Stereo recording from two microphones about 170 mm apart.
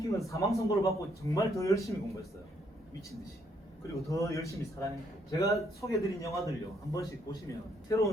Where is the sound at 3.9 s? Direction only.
20° left (ahead or behind).